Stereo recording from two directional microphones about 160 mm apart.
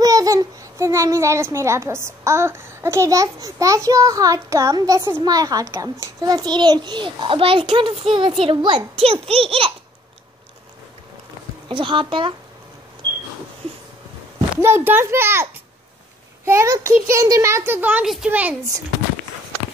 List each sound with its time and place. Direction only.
0.0 s a child's voice: 20° right (ahead or behind); by 9.7 s 35° right (ahead or behind)
11.7 s a child's voice: 30° right (ahead or behind)
14.5 s speech: 15° right (ahead or behind)
16.4 s a child's voice: 20° right (ahead or behind)